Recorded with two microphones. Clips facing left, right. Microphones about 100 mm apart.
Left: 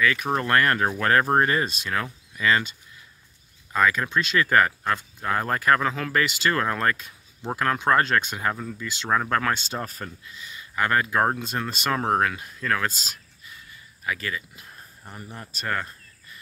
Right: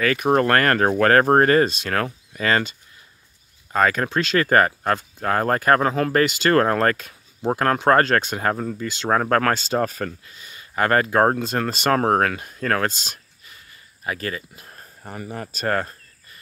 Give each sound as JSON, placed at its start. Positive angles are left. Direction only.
{"t": 0.0, "sound": "speech", "side_deg": -65}
{"t": 3.7, "sound": "speech", "side_deg": -60}
{"t": 4.4, "sound": "speech", "side_deg": -45}
{"t": 7.4, "sound": "speech", "side_deg": -45}
{"t": 9.5, "sound": "speech", "side_deg": -90}
{"t": 11.1, "sound": "speech", "side_deg": -45}
{"t": 11.7, "sound": "speech", "side_deg": -70}
{"t": 12.0, "sound": "speech", "side_deg": -45}
{"t": 12.8, "sound": "speech", "side_deg": -70}
{"t": 14.0, "sound": "speech", "side_deg": -45}
{"t": 15.0, "sound": "speech", "side_deg": -90}
{"t": 15.6, "sound": "speech", "side_deg": -55}